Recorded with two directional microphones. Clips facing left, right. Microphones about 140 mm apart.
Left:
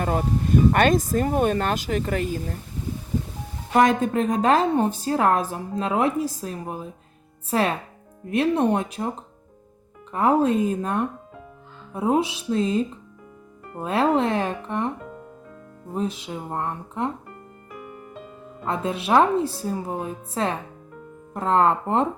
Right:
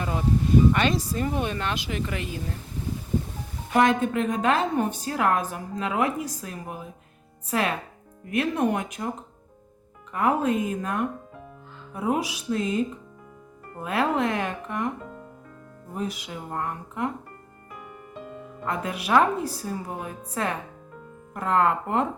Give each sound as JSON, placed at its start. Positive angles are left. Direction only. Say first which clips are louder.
{"t": 0.0, "sound": "speech", "louder": "left 2 dB", "side_deg": 50}
{"t": 3.8, "sound": "a woman's voice", "louder": "left 2 dB", "side_deg": 40}
{"t": 10.1, "sound": "a woman's voice", "louder": "left 4 dB", "side_deg": 30}
{"t": 18.6, "sound": "a woman's voice", "louder": "left 4 dB", "side_deg": 25}